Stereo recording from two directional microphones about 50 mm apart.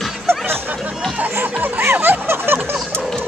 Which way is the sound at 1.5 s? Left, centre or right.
Right.